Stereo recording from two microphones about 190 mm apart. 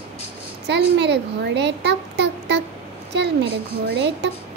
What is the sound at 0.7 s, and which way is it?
A child's voice, 65° right (ahead or behind).